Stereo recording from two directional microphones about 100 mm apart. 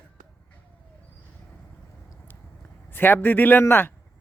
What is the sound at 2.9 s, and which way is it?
Speech, 20° left (ahead or behind).